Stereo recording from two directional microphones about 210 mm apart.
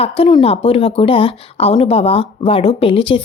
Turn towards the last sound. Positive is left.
turn(degrees=25)  # may be behind; listen again after turning